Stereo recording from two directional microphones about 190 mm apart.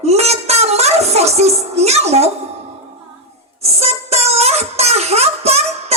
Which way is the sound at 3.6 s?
35° right (ahead or behind).